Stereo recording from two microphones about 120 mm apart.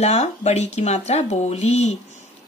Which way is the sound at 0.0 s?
65° left (ahead or behind).